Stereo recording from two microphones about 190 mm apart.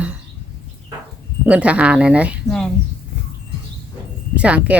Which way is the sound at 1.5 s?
5° right (ahead or behind).